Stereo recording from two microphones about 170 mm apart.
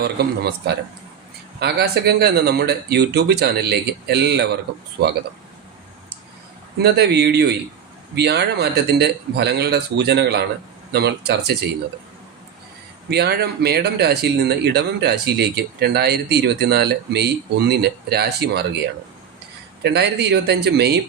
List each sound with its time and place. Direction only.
0.0 s speech: 70° right (ahead or behind)
6.7 s speech: 75° right (ahead or behind)
13.1 s speech: 70° right (ahead or behind)
19.8 s speech: 75° right (ahead or behind)